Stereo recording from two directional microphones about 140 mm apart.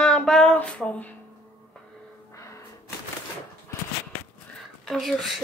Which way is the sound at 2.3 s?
20° left (ahead or behind).